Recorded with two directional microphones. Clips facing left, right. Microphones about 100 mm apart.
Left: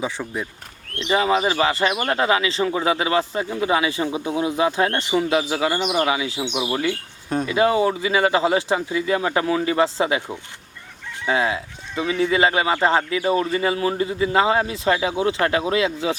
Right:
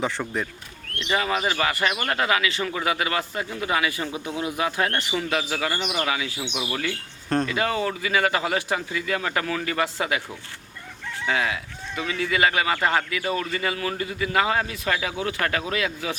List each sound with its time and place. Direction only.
0.0 s speech: 10° left (ahead or behind)
0.9 s speech: 25° left (ahead or behind)
7.3 s wind chime: 10° left (ahead or behind)
7.5 s speech: 20° left (ahead or behind)